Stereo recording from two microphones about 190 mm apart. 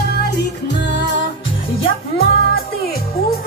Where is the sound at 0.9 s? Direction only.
65° left (ahead or behind).